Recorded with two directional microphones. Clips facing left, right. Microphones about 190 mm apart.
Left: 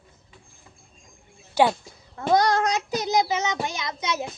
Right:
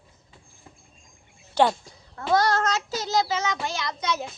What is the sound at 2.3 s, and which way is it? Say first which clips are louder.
Child singing: left 2 dB; 15° left (ahead or behind).